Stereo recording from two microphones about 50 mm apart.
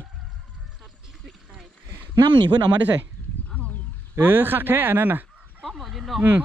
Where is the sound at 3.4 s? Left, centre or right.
Left.